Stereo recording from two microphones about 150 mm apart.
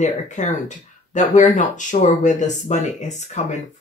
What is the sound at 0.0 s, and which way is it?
Speech, 55° left (ahead or behind).